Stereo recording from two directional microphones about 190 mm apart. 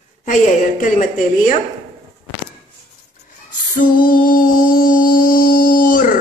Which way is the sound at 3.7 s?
45° left (ahead or behind).